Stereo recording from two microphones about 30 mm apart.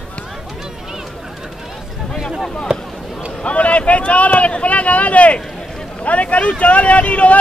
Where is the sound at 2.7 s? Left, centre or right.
Right.